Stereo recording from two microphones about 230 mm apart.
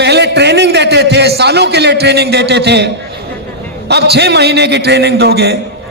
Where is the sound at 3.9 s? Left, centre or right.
Right.